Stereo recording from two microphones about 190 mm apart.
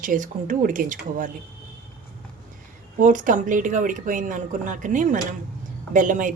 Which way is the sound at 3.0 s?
45° right (ahead or behind).